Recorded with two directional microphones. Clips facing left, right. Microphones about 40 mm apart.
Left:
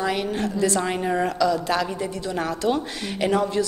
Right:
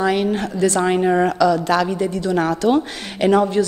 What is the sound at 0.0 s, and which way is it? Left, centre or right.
A woman's voice, right.